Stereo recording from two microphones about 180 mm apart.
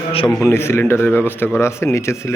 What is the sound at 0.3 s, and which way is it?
Speech, centre (ahead or behind).